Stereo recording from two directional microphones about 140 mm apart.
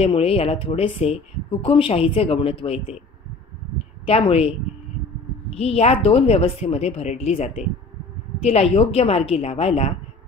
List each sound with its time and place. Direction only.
0.0 s speech: 45° left (ahead or behind)
4.0 s speech: 45° left (ahead or behind)